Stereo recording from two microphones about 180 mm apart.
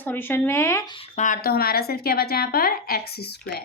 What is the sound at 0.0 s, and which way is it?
Speech, 10° left (ahead or behind).